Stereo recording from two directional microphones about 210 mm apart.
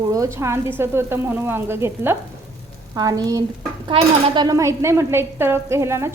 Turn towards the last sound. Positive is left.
turn(degrees=-15)  # may be behind; listen again after turning